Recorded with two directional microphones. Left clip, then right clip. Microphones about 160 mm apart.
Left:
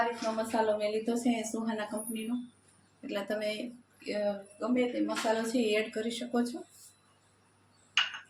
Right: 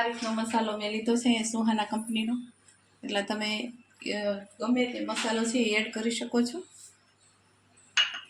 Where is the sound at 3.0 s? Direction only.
50° right (ahead or behind).